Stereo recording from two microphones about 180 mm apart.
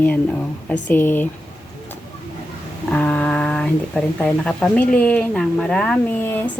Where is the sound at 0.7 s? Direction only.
10° left (ahead or behind).